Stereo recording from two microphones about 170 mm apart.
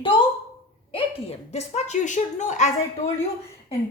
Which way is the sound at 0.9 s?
35° left (ahead or behind).